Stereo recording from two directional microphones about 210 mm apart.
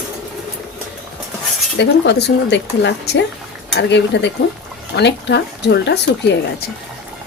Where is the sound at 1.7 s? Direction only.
55° left (ahead or behind).